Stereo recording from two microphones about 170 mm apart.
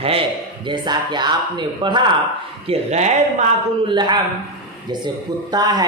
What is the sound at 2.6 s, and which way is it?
Speech, 40° right (ahead or behind).